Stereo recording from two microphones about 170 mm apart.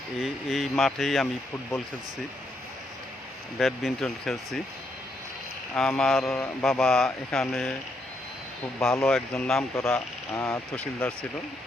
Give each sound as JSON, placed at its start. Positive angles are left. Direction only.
{"t": 0.2, "sound": "speech", "side_deg": 0}
{"t": 3.6, "sound": "speech", "side_deg": 0}
{"t": 5.7, "sound": "speech", "side_deg": 5}
{"t": 6.3, "sound": "speech", "side_deg": 15}
{"t": 6.7, "sound": "speech", "side_deg": 5}
{"t": 8.8, "sound": "speech", "side_deg": 0}
{"t": 10.3, "sound": "speech", "side_deg": 20}
{"t": 10.8, "sound": "speech", "side_deg": 5}